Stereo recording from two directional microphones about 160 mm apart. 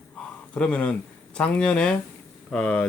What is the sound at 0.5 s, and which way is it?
Speech, 5° left (ahead or behind).